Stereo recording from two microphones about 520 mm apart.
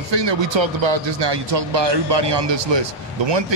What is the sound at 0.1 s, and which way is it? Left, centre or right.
Speech, right.